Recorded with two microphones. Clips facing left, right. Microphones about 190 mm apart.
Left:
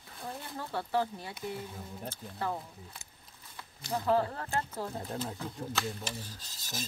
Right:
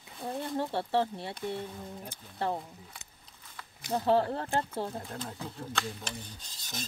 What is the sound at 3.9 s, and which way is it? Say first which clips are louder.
Speech: right 3 dB; 30° right (ahead or behind).